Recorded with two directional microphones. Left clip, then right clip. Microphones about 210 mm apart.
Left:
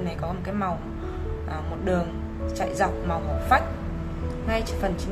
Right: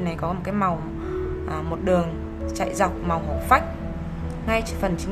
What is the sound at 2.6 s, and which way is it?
A woman's voice, 15° right (ahead or behind).